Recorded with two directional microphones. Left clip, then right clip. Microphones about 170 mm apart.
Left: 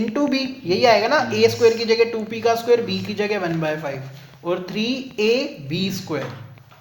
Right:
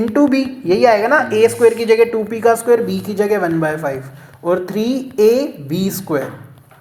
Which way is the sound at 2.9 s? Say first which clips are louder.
Right 6 dB; 55° right (ahead or behind).